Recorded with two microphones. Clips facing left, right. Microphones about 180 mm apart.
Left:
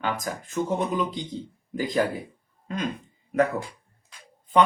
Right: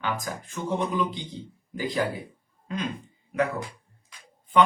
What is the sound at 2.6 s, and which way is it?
Speech, 45° left (ahead or behind).